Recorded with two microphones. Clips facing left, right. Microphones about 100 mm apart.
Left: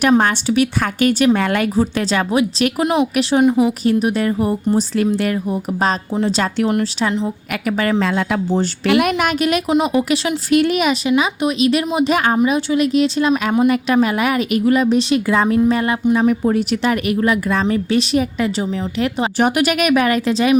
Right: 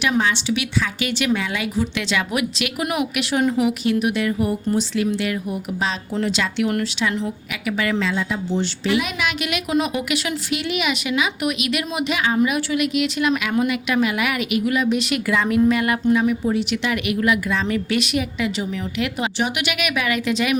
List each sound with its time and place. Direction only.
0.0 s a woman's voice: 50° left (ahead or behind); by 3.7 s 20° left (ahead or behind)
3.7 s a woman's voice: 35° left (ahead or behind)
7.8 s speech: 45° left (ahead or behind)
9.6 s a woman's voice: 25° left (ahead or behind)
10.5 s speech: 45° left (ahead or behind)
11.1 s a woman's voice: 30° left (ahead or behind)
12.4 s a woman's voice: 25° left (ahead or behind)
16.2 s speech: 50° left (ahead or behind)
16.8 s a woman's voice: 40° left (ahead or behind)